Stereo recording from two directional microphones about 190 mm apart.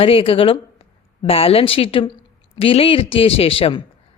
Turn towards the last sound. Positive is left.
turn(degrees=30)  # may be behind; listen again after turning